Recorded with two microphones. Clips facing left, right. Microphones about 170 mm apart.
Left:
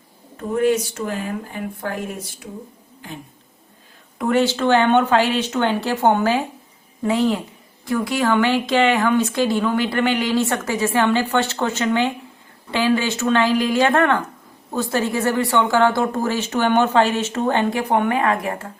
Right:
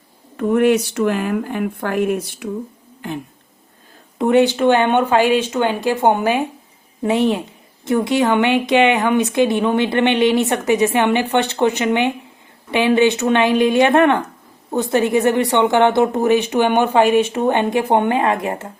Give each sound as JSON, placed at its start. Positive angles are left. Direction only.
{"t": 0.3, "sound": "speech", "side_deg": -70}
{"t": 4.2, "sound": "speech", "side_deg": -20}